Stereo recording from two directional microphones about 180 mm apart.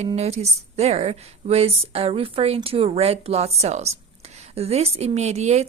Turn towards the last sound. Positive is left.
turn(degrees=-40)  # may be behind; listen again after turning